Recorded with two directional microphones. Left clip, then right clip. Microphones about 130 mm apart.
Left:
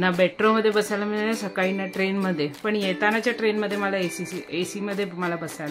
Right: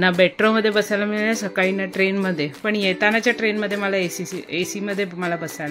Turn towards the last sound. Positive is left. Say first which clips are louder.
# right 3 dB
turn(degrees=-25)  # may be behind; listen again after turning